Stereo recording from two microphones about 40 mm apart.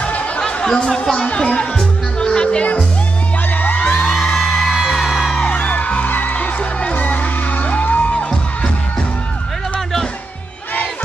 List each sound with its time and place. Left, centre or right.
0.6 s speech: centre
1.1 s speech: left
2.1 s music: left
4.0 s music: centre
4.8 s music: centre
5.7 s music: left
6.0 s music: left